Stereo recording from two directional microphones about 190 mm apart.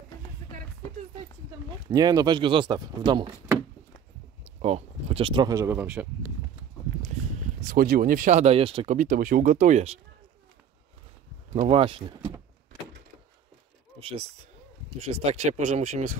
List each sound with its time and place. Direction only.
1.9 s speech: 20° right (ahead or behind)
4.6 s speech: 35° right (ahead or behind); by 6.0 s 10° right (ahead or behind)
7.7 s speech: 50° right (ahead or behind); by 8.9 s 30° right (ahead or behind)
8.9 s speech: 45° right (ahead or behind)
11.5 s speech: 35° right (ahead or behind)
13.9 s speech: 30° right (ahead or behind)